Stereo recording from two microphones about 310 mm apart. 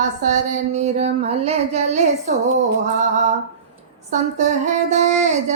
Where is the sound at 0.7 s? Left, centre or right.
Right.